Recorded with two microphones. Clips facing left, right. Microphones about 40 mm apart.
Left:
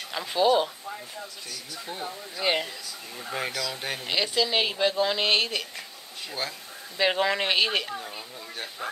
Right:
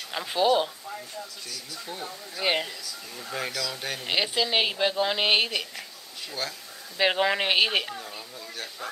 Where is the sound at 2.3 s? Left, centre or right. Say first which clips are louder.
Even; centre.